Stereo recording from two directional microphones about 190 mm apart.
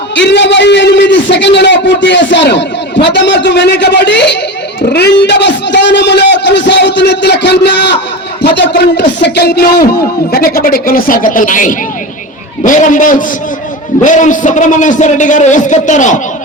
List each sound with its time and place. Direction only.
0.2 s a man's voice: 65° left (ahead or behind); by 16.2 s 40° left (ahead or behind)